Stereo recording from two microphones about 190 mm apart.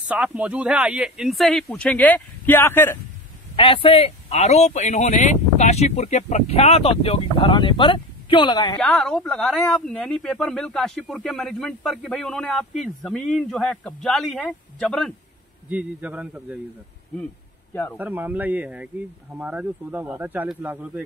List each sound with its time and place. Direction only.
0.1 s speech: 5° right (ahead or behind); by 3.0 s 10° left (ahead or behind)
3.5 s speech: 30° left (ahead or behind)
8.7 s speech: 5° left (ahead or behind)
15.7 s speech: 10° right (ahead or behind)
17.9 s speech: 10° right (ahead or behind)